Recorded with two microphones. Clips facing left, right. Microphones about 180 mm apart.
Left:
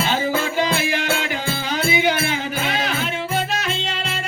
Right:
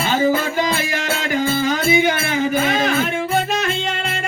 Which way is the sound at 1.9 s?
45° right (ahead or behind).